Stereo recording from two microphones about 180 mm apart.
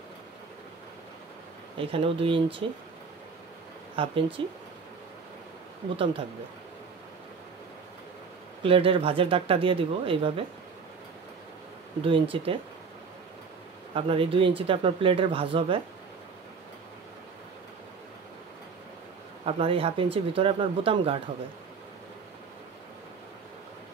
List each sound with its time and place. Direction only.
1.8 s speech: 30° right (ahead or behind)
3.9 s speech: 30° right (ahead or behind)
8.6 s speech: 30° right (ahead or behind)
12.0 s speech: 30° right (ahead or behind)
13.9 s speech: 30° right (ahead or behind)
19.4 s speech: 30° right (ahead or behind)